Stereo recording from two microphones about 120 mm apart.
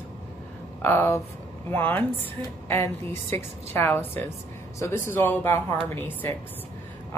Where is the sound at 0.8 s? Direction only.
20° left (ahead or behind).